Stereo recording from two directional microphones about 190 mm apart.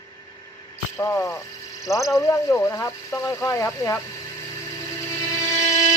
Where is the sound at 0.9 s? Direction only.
15° left (ahead or behind).